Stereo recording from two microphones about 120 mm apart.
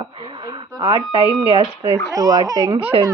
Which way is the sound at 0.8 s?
40° right (ahead or behind).